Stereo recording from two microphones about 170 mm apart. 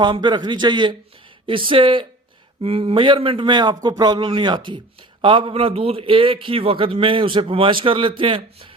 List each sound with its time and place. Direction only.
0.0 s a man's voice: 25° right (ahead or behind)